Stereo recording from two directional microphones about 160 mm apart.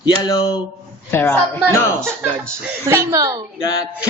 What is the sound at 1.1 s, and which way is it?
Speech, 15° left (ahead or behind).